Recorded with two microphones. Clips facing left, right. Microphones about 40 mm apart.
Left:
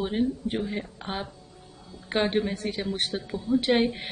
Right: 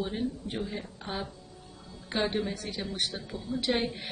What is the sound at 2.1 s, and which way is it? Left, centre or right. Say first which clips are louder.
Speech: left 5 dB; left.